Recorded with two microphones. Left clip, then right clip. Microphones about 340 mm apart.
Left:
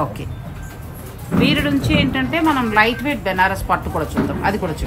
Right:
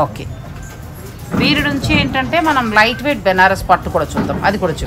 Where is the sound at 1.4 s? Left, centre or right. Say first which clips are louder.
Right 3 dB; right.